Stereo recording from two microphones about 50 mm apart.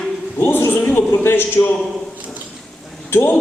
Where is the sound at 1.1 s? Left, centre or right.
Left.